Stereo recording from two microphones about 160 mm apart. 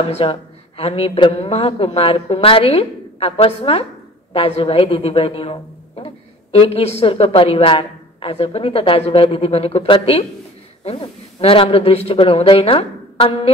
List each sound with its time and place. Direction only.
0.0 s a woman's voice: 40° left (ahead or behind)